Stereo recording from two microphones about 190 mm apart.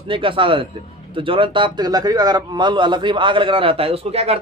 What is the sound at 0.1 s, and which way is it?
A man's voice, 25° right (ahead or behind).